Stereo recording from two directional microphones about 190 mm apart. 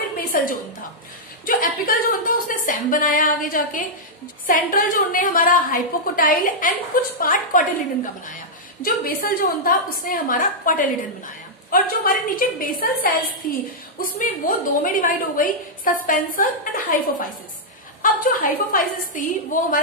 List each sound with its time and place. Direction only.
0.3 s a sound: 45° left (ahead or behind)
1.4 s a woman's voice: 50° left (ahead or behind)
18.0 s a woman's voice: 45° left (ahead or behind)